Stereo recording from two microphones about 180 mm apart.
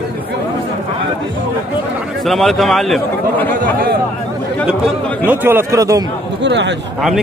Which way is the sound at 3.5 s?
55° right (ahead or behind).